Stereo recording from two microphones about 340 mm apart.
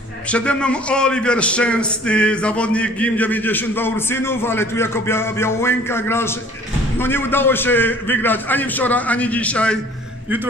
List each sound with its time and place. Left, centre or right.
0.3 s a man's voice: centre